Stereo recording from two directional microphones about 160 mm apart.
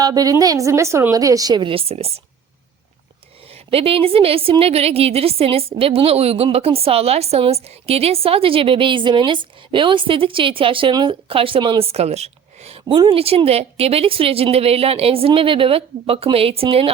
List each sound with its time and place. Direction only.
0.0 s a woman's voice: 25° right (ahead or behind); by 2.2 s 40° right (ahead or behind)
3.5 s a woman's voice: 35° right (ahead or behind)